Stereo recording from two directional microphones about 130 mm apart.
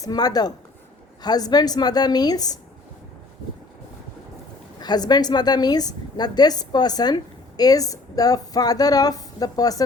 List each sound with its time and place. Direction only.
0.0 s a woman's voice: 30° left (ahead or behind)
4.8 s a woman's voice: 30° left (ahead or behind)